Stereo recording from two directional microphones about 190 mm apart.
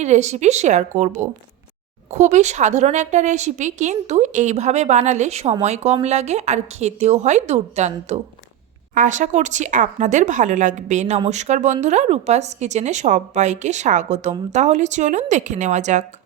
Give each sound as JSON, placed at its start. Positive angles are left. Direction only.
{"t": 0.0, "sound": "speech", "side_deg": -35}